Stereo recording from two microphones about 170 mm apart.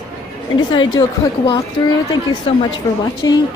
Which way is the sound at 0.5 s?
25° left (ahead or behind).